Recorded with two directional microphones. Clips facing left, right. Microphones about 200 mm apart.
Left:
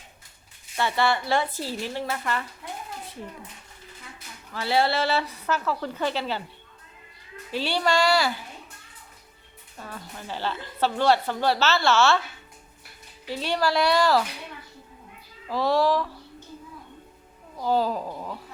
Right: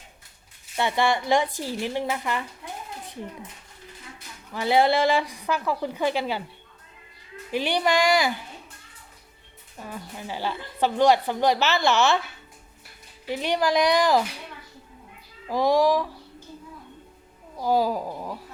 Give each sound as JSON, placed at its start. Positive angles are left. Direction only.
{"t": 0.8, "sound": "a woman's voice", "side_deg": -15}
{"t": 4.5, "sound": "a woman's voice", "side_deg": -15}
{"t": 7.5, "sound": "a woman's voice", "side_deg": -15}
{"t": 9.7, "sound": "a woman's voice", "side_deg": -15}
{"t": 13.3, "sound": "a woman's voice", "side_deg": -15}
{"t": 15.4, "sound": "a woman's voice", "side_deg": -15}
{"t": 17.6, "sound": "a woman's voice", "side_deg": -10}